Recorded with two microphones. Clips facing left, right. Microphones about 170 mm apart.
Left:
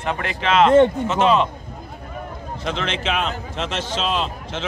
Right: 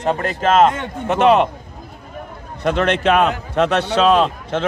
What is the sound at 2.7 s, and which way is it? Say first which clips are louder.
A man's voice: right 9 dB; 55° right (ahead or behind).